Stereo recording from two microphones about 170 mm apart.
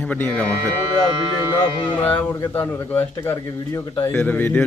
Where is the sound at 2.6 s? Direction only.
10° left (ahead or behind).